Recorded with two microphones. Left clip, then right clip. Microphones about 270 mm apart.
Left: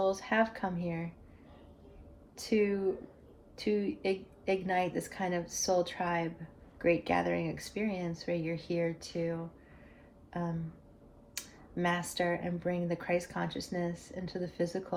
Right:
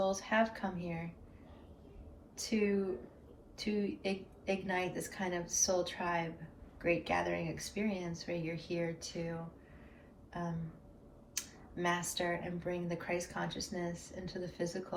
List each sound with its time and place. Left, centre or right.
0.1 s speech: left
2.3 s speech: left
11.3 s speech: left